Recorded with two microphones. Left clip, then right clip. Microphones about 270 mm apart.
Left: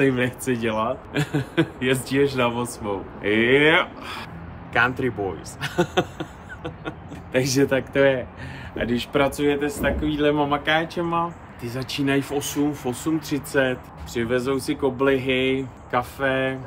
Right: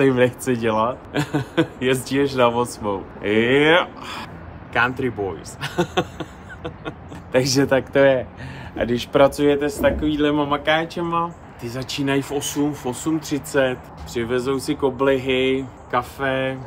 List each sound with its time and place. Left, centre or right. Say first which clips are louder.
0.0 s speech: right 4 dB; centre
7.3 s speech: right 3 dB; centre